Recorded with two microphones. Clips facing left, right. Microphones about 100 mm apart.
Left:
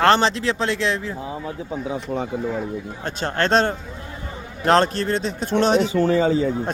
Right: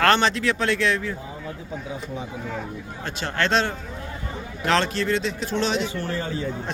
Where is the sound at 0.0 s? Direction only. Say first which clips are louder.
Left 3 dB; 30° left (ahead or behind).